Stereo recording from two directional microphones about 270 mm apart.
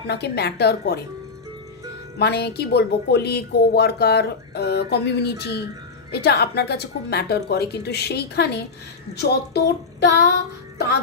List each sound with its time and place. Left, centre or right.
0.1 s speech: left
2.1 s speech: left